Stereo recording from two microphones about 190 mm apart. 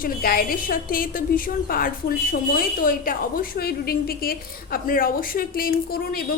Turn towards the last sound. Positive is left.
turn(degrees=50)  # may be behind; listen again after turning